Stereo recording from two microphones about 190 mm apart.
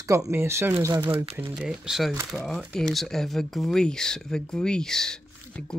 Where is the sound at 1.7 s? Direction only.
Centre (ahead or behind).